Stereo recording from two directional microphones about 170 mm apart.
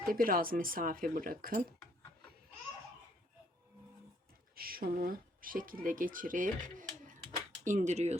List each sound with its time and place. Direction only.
0.1 s speech: 55° right (ahead or behind)
4.5 s speech: 60° right (ahead or behind); by 8.2 s 40° right (ahead or behind)